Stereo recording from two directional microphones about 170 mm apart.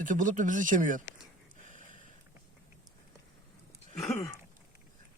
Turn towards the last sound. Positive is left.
turn(degrees=15)  # may be behind; listen again after turning